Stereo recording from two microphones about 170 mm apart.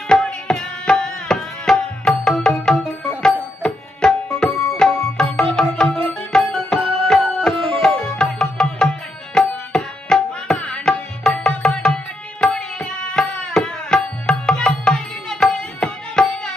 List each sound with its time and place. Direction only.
0.1 s tabla: 5° left (ahead or behind)
3.6 s music: 5° left (ahead or behind)
6.8 s music: 35° right (ahead or behind)
7.1 s music: 5° left (ahead or behind)